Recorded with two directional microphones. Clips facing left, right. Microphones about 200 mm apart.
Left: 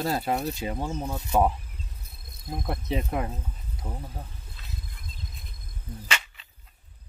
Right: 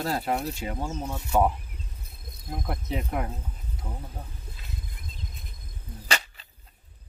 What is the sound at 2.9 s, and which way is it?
Speech, 20° left (ahead or behind).